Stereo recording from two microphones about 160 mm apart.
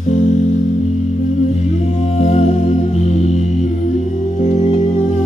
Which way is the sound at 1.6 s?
45° left (ahead or behind).